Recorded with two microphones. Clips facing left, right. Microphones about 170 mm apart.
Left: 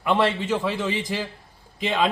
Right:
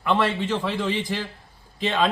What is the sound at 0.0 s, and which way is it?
A man's voice, 10° left (ahead or behind).